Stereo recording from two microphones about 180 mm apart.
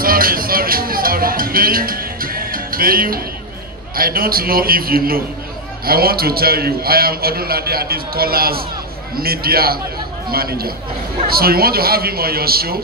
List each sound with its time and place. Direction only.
0.0 s music: 55° right (ahead or behind)
3.9 s a man's voice: 55° right (ahead or behind)